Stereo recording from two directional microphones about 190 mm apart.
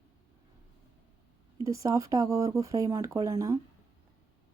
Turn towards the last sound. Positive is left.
turn(degrees=-15)  # may be behind; listen again after turning